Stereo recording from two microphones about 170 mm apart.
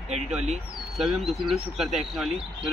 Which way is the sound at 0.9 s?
Centre (ahead or behind).